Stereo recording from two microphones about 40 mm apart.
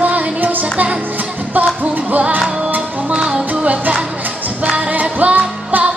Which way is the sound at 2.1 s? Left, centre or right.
Right.